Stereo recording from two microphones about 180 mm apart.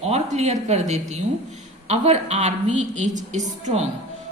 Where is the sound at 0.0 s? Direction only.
35° right (ahead or behind).